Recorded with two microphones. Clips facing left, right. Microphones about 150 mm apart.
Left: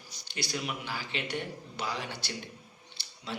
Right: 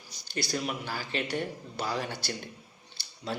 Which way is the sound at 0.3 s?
40° right (ahead or behind).